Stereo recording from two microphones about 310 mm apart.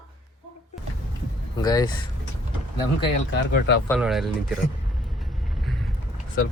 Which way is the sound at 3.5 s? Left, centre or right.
Left.